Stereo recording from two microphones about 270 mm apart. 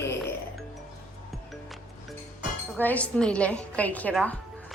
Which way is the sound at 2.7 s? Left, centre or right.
Centre.